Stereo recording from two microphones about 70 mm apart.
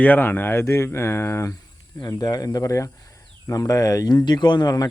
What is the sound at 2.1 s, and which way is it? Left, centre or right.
Speech, left.